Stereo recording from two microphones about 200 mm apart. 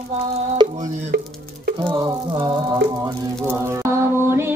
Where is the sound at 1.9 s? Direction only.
20° right (ahead or behind).